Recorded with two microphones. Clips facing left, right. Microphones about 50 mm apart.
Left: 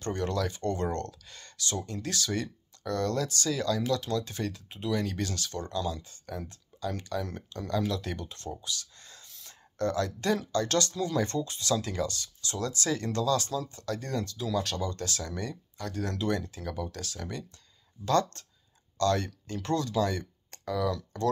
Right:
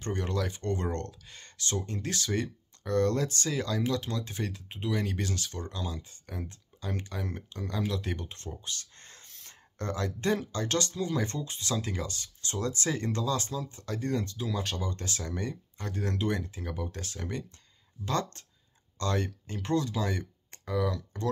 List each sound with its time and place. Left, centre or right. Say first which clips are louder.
0.0 s speech: left 2 dB; centre
12.4 s speech: right 1 dB; right
16.7 s speech: left 1 dB; right
18.0 s speech: left 5 dB; centre